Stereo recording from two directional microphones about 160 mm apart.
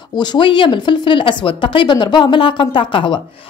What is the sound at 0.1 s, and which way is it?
Speech, 25° left (ahead or behind).